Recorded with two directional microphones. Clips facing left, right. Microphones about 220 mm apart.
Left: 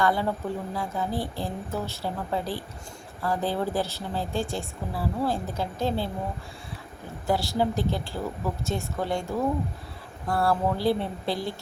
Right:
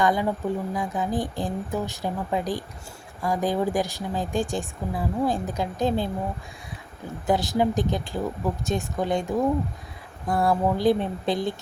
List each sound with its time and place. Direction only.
0.0 s a woman's voice: 15° right (ahead or behind)
7.3 s a woman's voice: 20° right (ahead or behind)